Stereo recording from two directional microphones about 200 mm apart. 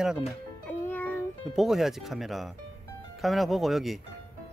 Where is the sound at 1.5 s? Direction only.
Centre (ahead or behind).